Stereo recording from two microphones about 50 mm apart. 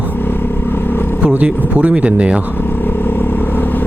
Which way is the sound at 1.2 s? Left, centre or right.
Right.